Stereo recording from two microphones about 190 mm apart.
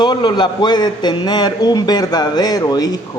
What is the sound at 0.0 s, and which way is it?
A man's voice, 20° left (ahead or behind).